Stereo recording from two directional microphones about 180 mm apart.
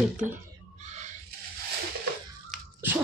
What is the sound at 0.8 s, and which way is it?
Owl, 40° right (ahead or behind).